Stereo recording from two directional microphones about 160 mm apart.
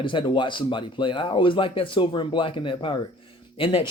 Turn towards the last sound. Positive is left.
turn(degrees=35)  # may be behind; listen again after turning